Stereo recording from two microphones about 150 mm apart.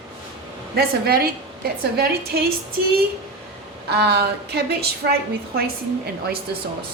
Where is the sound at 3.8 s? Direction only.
90° right.